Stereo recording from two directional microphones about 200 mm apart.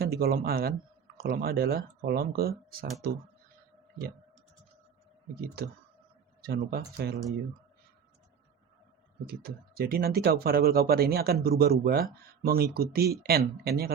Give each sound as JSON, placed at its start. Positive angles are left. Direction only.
{"t": 0.0, "sound": "speech", "side_deg": -50}
{"t": 6.4, "sound": "speech", "side_deg": -50}
{"t": 9.2, "sound": "speech", "side_deg": -50}